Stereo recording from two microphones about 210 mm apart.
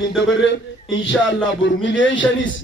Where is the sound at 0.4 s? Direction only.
60° left (ahead or behind).